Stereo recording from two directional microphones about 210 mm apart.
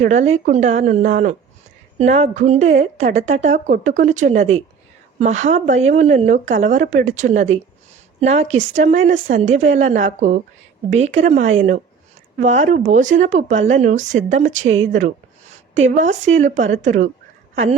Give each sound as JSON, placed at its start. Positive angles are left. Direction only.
{"t": 0.0, "sound": "speech", "side_deg": -35}
{"t": 14.9, "sound": "a sound", "side_deg": -35}
{"t": 15.8, "sound": "speech", "side_deg": -35}